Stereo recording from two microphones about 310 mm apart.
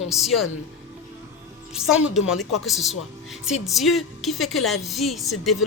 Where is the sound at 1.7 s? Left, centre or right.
Centre.